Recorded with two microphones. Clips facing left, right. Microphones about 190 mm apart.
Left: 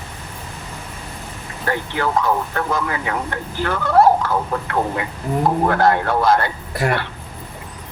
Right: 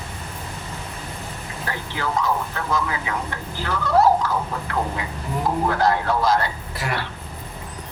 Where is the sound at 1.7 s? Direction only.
55° left (ahead or behind).